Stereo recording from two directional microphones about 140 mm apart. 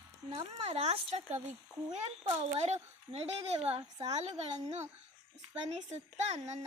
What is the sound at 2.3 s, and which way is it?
A child's voice, 50° right (ahead or behind).